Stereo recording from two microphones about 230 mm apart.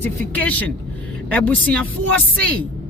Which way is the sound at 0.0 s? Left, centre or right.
Centre.